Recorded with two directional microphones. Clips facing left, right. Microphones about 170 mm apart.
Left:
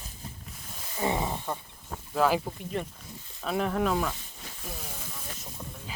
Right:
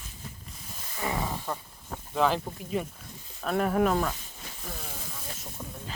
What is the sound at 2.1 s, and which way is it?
Speech, 5° left (ahead or behind).